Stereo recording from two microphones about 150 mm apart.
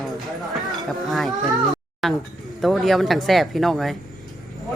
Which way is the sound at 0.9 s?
Centre (ahead or behind).